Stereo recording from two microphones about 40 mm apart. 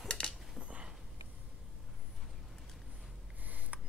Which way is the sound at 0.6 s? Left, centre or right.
Right.